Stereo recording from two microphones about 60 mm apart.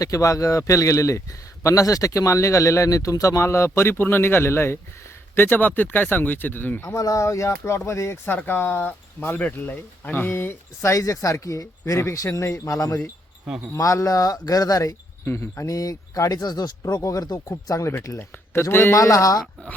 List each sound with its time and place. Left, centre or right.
0.0 s speech: left
1.6 s speech: left
5.3 s speech: left
6.8 s speech: left
7.5 s speech: left
8.4 s speech: left
10.8 s speech: left
13.7 s speech: left
15.4 s speech: left
18.7 s speech: left
18.9 s speech: left